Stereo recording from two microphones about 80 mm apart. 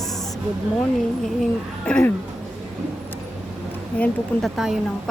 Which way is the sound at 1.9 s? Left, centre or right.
Centre.